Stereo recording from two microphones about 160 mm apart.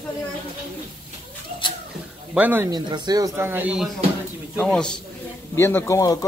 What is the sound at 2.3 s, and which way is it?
Speech, 10° right (ahead or behind).